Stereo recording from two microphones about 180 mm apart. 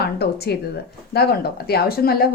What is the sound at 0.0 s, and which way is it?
A woman's voice, 60° left (ahead or behind).